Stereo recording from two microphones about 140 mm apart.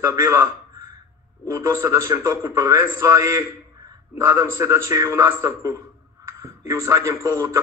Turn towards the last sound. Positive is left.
turn(degrees=-20)  # may be behind; listen again after turning